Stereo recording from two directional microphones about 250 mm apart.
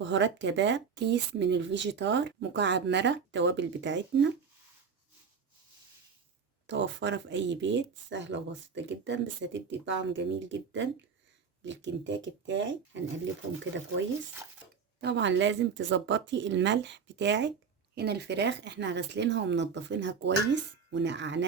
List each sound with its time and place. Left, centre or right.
0.0 s speech: right
6.7 s speech: right
15.0 s speech: right